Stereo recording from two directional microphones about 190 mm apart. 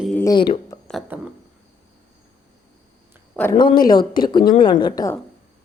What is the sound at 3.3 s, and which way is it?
Speech, 10° left (ahead or behind).